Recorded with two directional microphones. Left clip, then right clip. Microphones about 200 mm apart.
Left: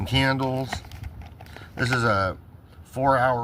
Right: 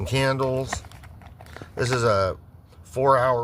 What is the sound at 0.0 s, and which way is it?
Speech, 50° right (ahead or behind).